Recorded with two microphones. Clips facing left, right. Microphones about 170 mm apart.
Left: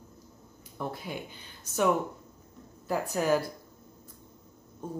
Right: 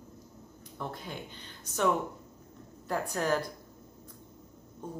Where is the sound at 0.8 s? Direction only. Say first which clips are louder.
Left 3 dB; 10° left (ahead or behind).